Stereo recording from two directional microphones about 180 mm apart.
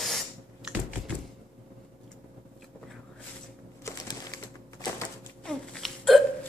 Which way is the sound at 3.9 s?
20° left (ahead or behind).